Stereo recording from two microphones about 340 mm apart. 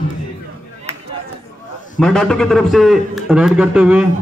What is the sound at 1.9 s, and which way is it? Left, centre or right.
A man's voice, centre.